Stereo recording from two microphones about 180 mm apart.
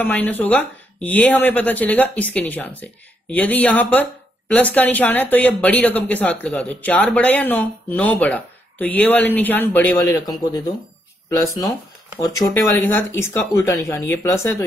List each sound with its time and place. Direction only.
0.0 s speech: 10° left (ahead or behind)
10.2 s speech: 20° left (ahead or behind)